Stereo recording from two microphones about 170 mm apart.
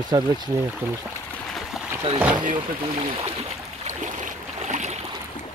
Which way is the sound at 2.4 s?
40° right (ahead or behind).